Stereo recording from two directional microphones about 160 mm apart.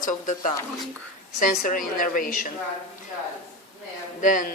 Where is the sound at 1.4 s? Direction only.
60° left (ahead or behind).